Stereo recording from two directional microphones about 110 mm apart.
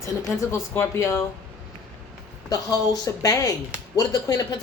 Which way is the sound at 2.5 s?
35° left (ahead or behind).